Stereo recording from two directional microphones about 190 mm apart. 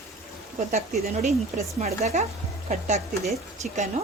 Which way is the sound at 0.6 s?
35° right (ahead or behind).